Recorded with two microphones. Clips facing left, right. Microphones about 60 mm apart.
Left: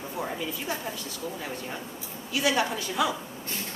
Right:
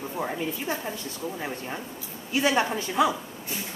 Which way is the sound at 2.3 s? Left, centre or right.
Right.